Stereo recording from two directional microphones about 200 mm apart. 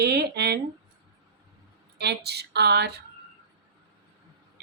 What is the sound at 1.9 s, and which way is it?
A woman's voice, 55° right (ahead or behind).